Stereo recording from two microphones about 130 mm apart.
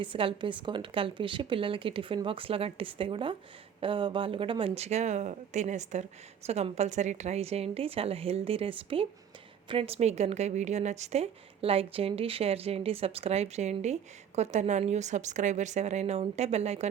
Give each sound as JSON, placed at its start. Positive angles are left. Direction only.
{"t": 0.0, "sound": "a woman's voice", "side_deg": -40}